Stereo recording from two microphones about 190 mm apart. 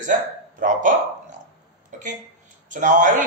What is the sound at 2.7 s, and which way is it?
Speech, 45° right (ahead or behind).